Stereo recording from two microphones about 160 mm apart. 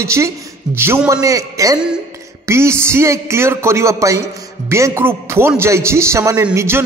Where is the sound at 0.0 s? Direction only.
20° right (ahead or behind).